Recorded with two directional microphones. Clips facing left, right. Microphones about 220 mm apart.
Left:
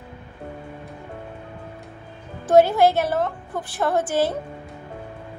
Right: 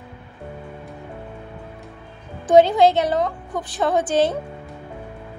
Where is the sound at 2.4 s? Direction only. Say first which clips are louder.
Right 2 dB; 20° right (ahead or behind).